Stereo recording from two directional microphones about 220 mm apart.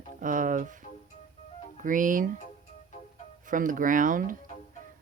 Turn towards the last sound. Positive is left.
turn(degrees=-40)  # may be behind; listen again after turning